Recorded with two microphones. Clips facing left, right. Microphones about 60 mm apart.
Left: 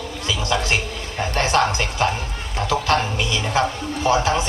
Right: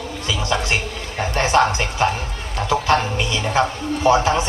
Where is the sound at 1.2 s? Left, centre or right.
Right.